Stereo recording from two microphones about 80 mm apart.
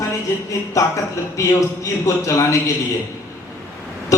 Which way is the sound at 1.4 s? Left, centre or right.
Left.